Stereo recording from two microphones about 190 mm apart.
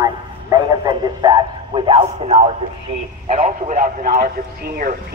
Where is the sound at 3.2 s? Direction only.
40° right (ahead or behind).